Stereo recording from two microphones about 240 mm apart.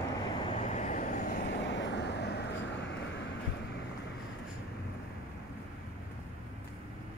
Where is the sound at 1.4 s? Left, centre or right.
Left.